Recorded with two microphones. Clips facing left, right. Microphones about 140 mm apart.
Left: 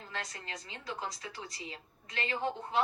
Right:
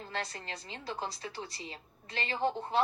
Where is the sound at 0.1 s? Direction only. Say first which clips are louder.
Right 2 dB; 30° right (ahead or behind).